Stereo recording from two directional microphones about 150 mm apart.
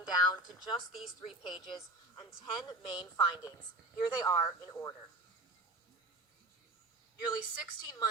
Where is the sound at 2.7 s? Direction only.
30° left (ahead or behind).